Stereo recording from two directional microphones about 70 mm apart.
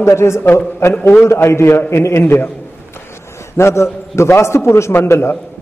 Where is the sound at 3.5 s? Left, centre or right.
Left.